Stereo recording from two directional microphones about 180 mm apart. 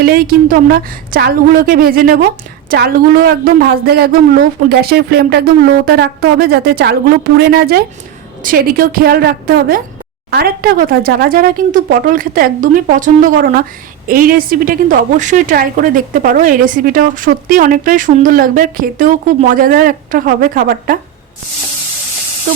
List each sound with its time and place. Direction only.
0.0 s a woman's voice: 55° right (ahead or behind)